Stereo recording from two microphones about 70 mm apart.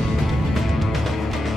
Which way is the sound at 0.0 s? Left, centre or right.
Centre.